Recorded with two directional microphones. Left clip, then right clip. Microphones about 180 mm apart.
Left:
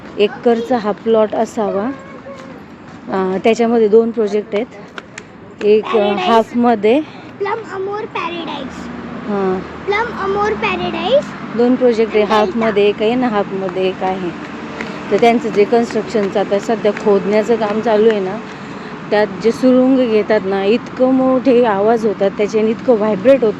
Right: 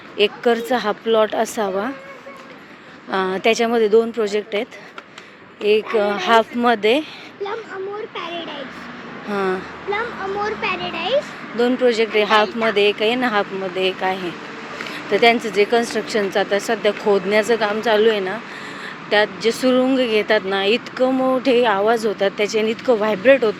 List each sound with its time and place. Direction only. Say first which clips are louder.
0.2 s speech: left 3 dB; centre (ahead or behind)
3.1 s speech: left 3 dB; centre (ahead or behind)
5.6 s speech: left 5 dB; centre (ahead or behind)
8.1 s a sound: left 6 dB; 30° left (ahead or behind)
9.9 s speech: left 7 dB; 60° left (ahead or behind)
11.5 s speech: left 4 dB; centre (ahead or behind)